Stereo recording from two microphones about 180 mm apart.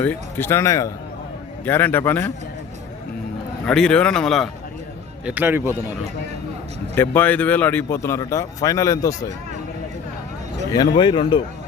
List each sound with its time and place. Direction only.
0.0 s a man's voice: 10° left (ahead or behind)
3.7 s speech: 5° left (ahead or behind)
5.2 s a man's voice: 10° right (ahead or behind)
6.9 s a man's voice: 10° left (ahead or behind)
10.7 s a man's voice: 25° left (ahead or behind)